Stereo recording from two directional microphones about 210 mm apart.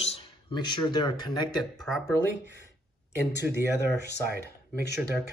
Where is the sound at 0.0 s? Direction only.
25° left (ahead or behind).